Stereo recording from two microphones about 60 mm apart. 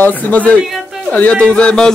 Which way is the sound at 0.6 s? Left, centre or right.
Centre.